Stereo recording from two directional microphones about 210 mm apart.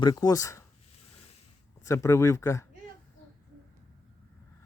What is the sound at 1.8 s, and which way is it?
Speech, 15° left (ahead or behind).